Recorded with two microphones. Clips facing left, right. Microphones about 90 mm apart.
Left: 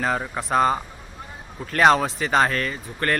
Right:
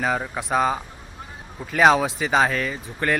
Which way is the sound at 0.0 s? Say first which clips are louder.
Even; centre (ahead or behind).